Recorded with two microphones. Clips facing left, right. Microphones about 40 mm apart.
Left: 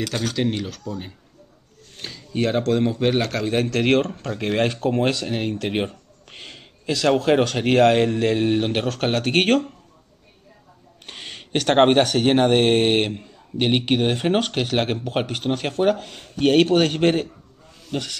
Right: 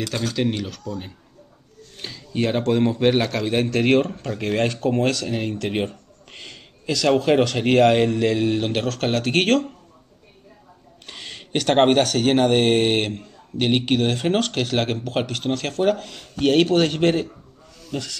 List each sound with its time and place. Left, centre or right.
0.4 s a man's voice: centre
2.0 s a sound: centre
2.3 s speech: centre
3.9 s a man's voice: centre
4.3 s speech: centre
5.0 s speech: left
6.4 s a sound: centre
7.1 s a man's voice: centre
8.4 s speech: left
8.8 s speech: centre
11.1 s speech: left
16.2 s speech: left